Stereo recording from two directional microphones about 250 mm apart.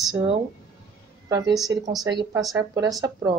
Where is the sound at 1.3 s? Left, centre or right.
Centre.